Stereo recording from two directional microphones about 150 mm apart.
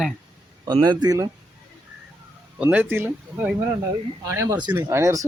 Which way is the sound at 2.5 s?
10° right (ahead or behind).